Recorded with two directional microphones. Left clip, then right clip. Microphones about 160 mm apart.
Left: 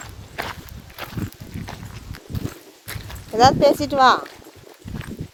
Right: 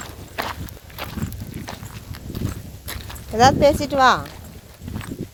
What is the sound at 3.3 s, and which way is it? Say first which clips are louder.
Speech: even; 20° left (ahead or behind).